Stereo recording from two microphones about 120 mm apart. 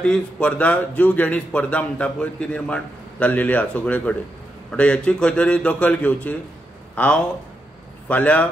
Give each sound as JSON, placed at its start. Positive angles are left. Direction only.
{"t": 0.0, "sound": "speech", "side_deg": 10}
{"t": 8.1, "sound": "speech", "side_deg": 10}